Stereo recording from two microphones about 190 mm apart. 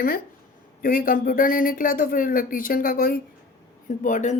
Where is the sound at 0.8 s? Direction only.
50° left (ahead or behind).